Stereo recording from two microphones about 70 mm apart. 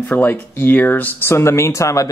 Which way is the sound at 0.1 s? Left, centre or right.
Left.